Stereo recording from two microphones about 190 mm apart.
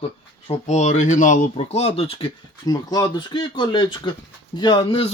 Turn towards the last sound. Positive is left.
turn(degrees=30)  # may be behind; listen again after turning